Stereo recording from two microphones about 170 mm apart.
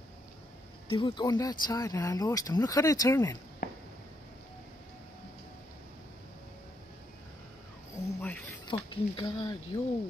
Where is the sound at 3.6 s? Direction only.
55° left (ahead or behind).